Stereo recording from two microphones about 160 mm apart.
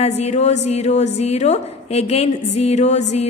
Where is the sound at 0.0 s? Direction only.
45° left (ahead or behind).